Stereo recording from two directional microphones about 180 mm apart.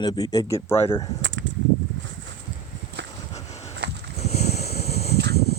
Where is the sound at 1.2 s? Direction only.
90° right.